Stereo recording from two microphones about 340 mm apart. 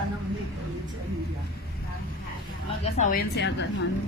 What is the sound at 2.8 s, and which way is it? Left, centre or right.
Speech, left.